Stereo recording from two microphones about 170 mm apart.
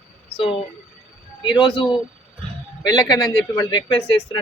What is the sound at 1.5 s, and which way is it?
Speech, 30° left (ahead or behind).